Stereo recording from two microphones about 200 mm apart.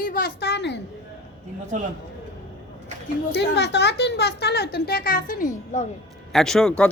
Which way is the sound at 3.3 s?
60° left (ahead or behind).